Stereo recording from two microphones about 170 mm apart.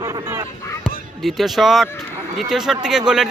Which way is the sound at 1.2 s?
Centre (ahead or behind).